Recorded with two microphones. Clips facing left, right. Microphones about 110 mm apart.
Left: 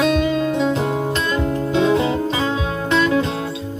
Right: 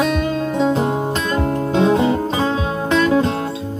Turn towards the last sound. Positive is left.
turn(degrees=-40)  # may be behind; listen again after turning